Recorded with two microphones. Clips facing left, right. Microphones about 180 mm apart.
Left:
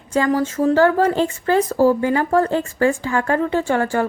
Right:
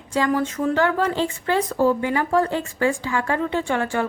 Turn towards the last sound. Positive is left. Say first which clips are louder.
# left 4 dB
turn(degrees=40)  # may be behind; listen again after turning